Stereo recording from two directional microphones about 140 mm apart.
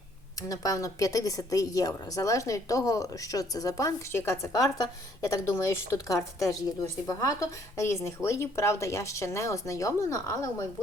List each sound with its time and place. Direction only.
0.3 s a woman's voice: 25° left (ahead or behind)